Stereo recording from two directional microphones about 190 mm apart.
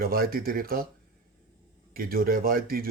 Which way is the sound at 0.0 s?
50° right (ahead or behind).